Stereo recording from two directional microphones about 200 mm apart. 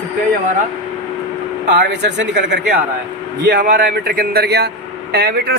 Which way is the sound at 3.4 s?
50° right (ahead or behind).